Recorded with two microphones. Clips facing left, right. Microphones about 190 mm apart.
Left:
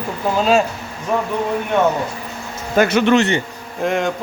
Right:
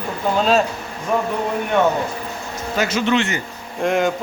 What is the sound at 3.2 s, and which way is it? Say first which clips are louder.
Speech: left 5 dB; 30° left (ahead or behind).